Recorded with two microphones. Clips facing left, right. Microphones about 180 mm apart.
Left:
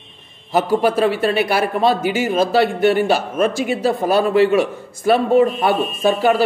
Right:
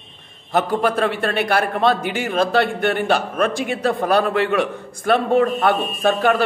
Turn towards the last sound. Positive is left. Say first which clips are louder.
# left 2 dB
turn(degrees=5)  # may be behind; listen again after turning